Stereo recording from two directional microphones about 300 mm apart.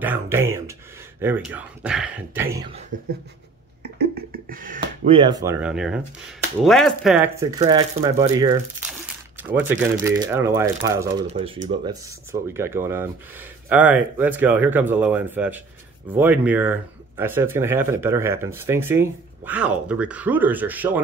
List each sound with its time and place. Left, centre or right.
0.0 s speech: centre
3.8 s speech: right; by 8.8 s centre
8.9 s crumpling: centre
9.7 s speech: centre